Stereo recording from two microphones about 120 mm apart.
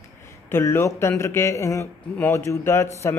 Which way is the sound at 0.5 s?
20° left (ahead or behind).